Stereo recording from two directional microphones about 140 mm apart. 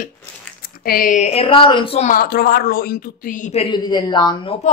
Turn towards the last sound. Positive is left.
turn(degrees=35)  # may be behind; listen again after turning